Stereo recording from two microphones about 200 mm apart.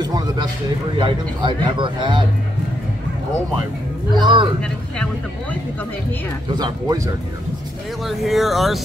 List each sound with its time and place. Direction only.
0.0 s speech: 20° right (ahead or behind)
4.1 s speech: 20° right (ahead or behind)
4.9 s speech: 5° left (ahead or behind)
8.1 s speech: centre (ahead or behind)